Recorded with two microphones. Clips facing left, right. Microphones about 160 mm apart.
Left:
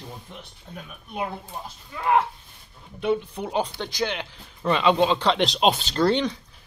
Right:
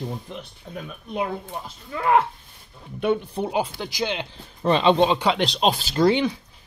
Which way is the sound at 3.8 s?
10° right (ahead or behind).